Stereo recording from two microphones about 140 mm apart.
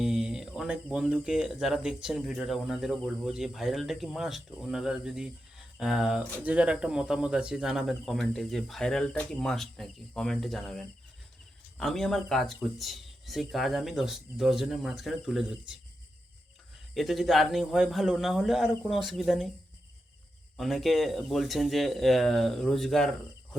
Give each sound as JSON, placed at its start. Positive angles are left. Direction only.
{"t": 0.0, "sound": "speech", "side_deg": -5}
{"t": 16.9, "sound": "speech", "side_deg": 0}
{"t": 20.6, "sound": "speech", "side_deg": 0}